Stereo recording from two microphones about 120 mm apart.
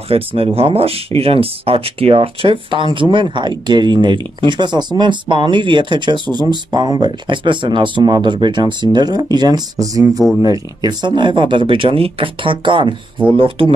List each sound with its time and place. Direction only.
0.1 s speech: 50° right (ahead or behind)